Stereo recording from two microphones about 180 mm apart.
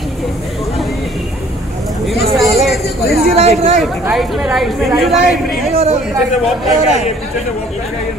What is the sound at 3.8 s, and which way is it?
Speech, centre (ahead or behind).